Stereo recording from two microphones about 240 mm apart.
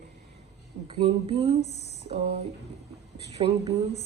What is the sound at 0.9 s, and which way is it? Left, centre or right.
Speech, right.